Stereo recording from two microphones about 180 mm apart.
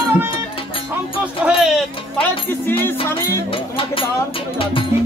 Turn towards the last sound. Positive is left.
turn(degrees=30)  # may be behind; listen again after turning